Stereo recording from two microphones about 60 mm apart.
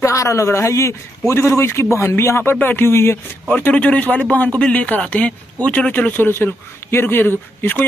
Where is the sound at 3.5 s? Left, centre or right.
Left.